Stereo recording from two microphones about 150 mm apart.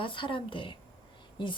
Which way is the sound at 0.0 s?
35° left (ahead or behind).